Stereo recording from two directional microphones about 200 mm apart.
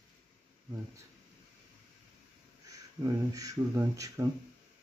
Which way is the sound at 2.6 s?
15° right (ahead or behind).